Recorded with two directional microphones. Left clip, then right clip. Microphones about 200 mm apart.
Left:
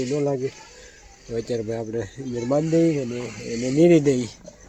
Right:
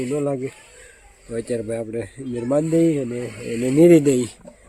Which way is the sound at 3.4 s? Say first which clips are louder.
Right 4 dB; 45° right (ahead or behind).